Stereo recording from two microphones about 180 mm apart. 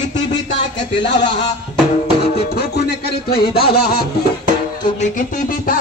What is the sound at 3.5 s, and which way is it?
Music, 60° left (ahead or behind).